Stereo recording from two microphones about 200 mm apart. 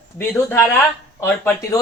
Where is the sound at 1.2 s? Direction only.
15° left (ahead or behind).